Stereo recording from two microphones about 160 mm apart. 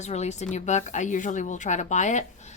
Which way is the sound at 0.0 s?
45° left (ahead or behind).